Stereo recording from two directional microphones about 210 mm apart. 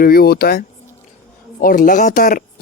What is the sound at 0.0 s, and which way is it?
Speech, 45° left (ahead or behind).